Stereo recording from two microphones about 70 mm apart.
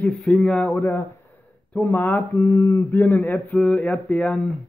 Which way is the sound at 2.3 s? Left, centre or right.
Left.